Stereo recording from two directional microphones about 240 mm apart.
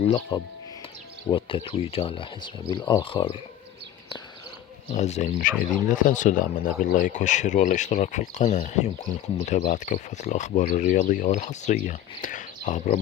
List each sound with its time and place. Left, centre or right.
0.1 s speech: centre
4.9 s speech: left